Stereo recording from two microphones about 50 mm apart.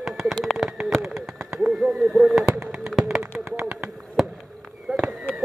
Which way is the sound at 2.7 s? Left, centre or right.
Centre.